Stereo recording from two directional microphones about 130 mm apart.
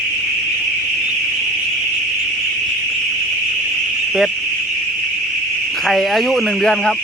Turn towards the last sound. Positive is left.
turn(degrees=5)  # may be behind; listen again after turning